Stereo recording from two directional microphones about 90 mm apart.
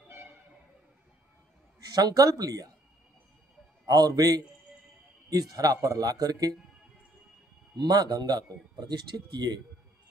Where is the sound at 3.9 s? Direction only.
45° right (ahead or behind).